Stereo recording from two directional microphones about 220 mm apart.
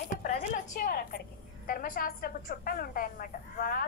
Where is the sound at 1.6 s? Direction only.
40° left (ahead or behind).